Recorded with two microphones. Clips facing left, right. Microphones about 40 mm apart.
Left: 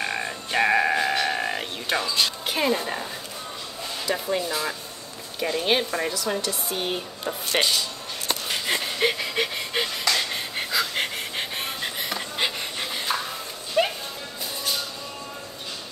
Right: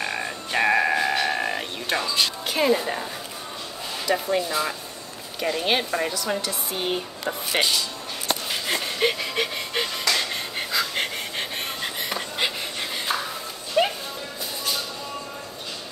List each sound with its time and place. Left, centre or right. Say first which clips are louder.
0.0 s music: even; centre
4.1 s speech: right 3 dB; centre
8.5 s a sound: even; centre
12.4 s pant: even; centre
13.8 s music: right 1 dB; centre